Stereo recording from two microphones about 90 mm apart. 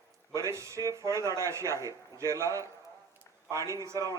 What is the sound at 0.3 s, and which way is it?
A man's voice, 35° right (ahead or behind).